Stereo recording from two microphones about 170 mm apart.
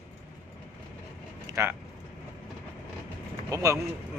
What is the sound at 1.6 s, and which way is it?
Speech, 15° right (ahead or behind).